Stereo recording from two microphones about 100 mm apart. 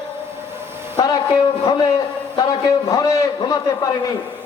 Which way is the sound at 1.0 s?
40° left (ahead or behind).